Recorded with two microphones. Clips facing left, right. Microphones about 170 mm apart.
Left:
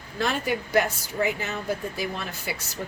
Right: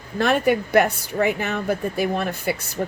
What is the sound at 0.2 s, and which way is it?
Speech, 60° right (ahead or behind).